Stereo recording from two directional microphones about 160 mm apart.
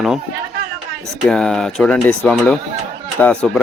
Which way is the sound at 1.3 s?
5° left (ahead or behind).